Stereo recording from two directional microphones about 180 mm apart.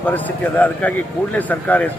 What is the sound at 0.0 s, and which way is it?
A man's voice, 10° left (ahead or behind).